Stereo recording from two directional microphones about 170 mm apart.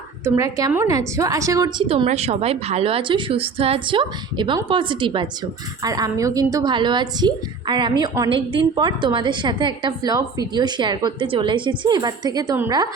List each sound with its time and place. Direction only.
0.3 s a woman's voice: 20° right (ahead or behind)
1.9 s a woman's voice: 35° right (ahead or behind); by 12.9 s 20° right (ahead or behind)